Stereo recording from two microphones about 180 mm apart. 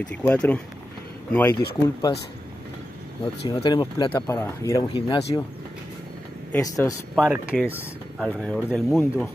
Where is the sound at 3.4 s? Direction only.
25° left (ahead or behind).